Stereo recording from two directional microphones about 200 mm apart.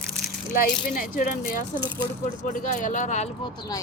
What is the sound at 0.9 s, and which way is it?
Speech, 45° left (ahead or behind).